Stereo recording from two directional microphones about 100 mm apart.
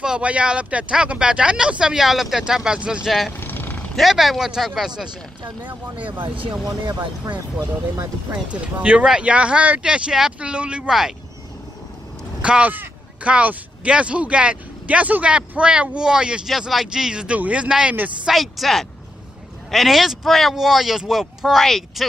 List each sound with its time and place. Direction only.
0.0 s speech: 10° right (ahead or behind)
3.3 s vehicle: 20° left (ahead or behind)
3.9 s speech: centre (ahead or behind)
6.2 s speech: 60° right (ahead or behind)
6.6 s speech: 45° right (ahead or behind)
8.8 s speech: 10° right (ahead or behind)
12.4 s speech: 10° right (ahead or behind)